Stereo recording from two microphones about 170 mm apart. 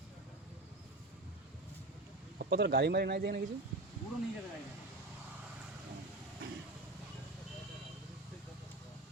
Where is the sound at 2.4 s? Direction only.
85° right; by 3.4 s 65° right (ahead or behind).